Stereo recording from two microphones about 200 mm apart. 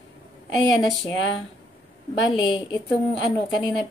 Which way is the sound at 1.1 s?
70° left (ahead or behind).